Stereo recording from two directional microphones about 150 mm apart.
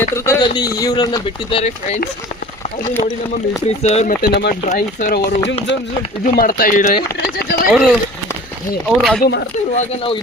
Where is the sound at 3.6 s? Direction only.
45° left (ahead or behind).